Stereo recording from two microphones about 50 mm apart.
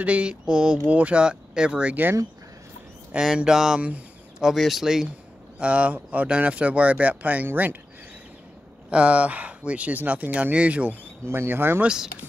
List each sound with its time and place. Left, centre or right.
0.0 s speech: right
0.8 s speech: right
1.2 s speech: centre
3.3 s speech: centre
5.6 s speech: right
8.9 s speech: right
11.2 s speech: right
11.8 s speech: centre